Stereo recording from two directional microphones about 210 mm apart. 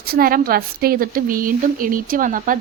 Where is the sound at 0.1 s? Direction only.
45° right (ahead or behind).